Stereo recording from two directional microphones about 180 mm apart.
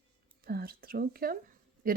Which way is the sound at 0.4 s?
55° right (ahead or behind).